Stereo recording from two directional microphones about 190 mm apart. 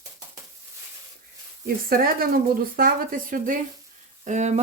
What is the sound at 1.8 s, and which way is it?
A woman's voice, 50° right (ahead or behind).